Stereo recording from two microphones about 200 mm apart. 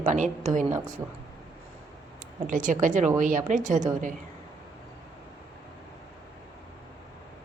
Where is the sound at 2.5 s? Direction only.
40° right (ahead or behind).